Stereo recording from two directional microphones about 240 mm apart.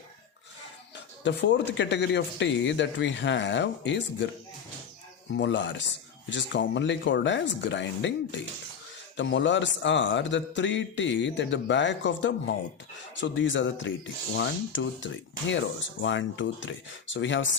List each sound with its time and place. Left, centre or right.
0.9 s speech: left
5.3 s speech: left